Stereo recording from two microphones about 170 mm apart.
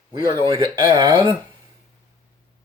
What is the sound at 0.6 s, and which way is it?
Speech, 20° right (ahead or behind).